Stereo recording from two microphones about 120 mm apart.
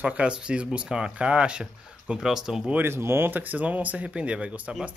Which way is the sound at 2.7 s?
20° right (ahead or behind).